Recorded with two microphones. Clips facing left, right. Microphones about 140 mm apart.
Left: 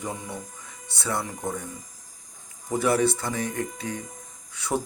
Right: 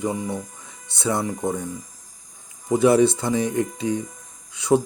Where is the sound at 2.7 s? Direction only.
20° right (ahead or behind).